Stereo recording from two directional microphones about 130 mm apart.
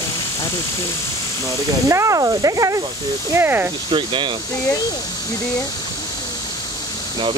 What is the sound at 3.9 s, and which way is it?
Speech, 40° right (ahead or behind).